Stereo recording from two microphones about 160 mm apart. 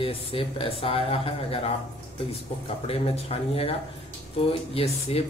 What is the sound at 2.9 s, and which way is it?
A man's voice, 35° left (ahead or behind).